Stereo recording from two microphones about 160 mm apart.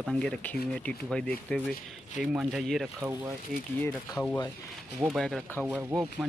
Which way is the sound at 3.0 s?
10° right (ahead or behind).